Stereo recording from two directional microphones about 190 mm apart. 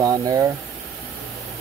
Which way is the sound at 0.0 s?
20° right (ahead or behind).